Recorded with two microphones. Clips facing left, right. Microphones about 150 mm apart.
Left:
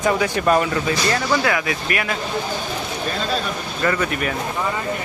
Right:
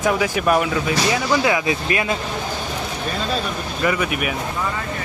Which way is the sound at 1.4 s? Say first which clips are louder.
Right 2 dB; 20° right (ahead or behind).